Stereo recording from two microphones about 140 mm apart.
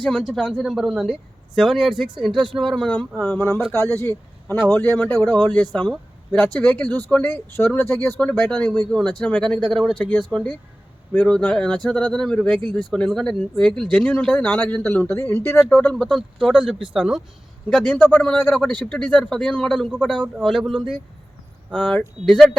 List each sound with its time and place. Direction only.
0.0 s a man's voice: 5° left (ahead or behind)
3.2 s a man's voice: 20° left (ahead or behind); by 17.2 s 5° right (ahead or behind)
17.8 s a man's voice: 15° left (ahead or behind)